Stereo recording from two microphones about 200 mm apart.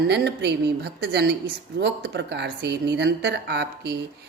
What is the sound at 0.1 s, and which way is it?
A woman's voice, 55° right (ahead or behind).